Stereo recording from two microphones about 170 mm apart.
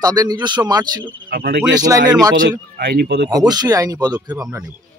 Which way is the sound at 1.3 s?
65° right (ahead or behind).